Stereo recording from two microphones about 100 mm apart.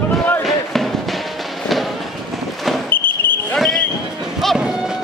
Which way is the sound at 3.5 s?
5° left (ahead or behind).